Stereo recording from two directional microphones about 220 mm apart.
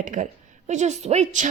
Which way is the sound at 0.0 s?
35° right (ahead or behind).